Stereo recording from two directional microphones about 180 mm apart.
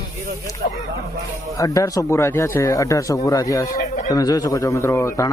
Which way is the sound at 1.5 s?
20° left (ahead or behind).